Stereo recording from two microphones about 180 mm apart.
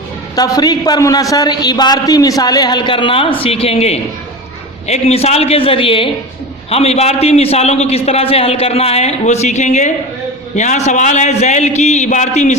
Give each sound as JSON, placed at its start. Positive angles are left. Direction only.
{"t": 0.3, "sound": "a man's voice", "side_deg": 20}